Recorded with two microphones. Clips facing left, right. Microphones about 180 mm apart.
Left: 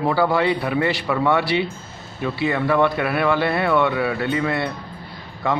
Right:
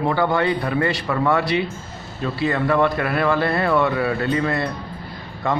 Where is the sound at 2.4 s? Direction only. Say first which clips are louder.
Even; 20° left (ahead or behind).